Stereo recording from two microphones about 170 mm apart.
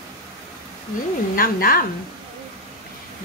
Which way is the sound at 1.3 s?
60° left (ahead or behind).